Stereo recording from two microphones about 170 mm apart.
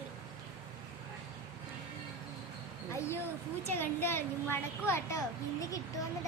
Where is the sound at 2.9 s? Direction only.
15° left (ahead or behind).